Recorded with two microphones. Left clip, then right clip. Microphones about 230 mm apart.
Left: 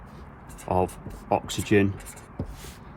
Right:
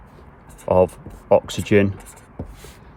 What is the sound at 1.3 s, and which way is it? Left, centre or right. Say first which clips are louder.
Speech: right 7 dB; right.